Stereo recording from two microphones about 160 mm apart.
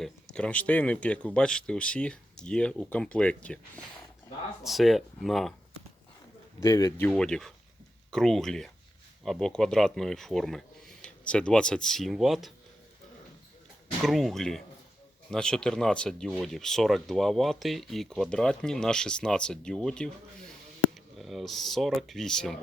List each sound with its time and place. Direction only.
0.0 s speech: 5° left (ahead or behind)
6.6 s speech: 20° left (ahead or behind)
7.1 s speech: 5° left (ahead or behind)
14.0 s speech: centre (ahead or behind)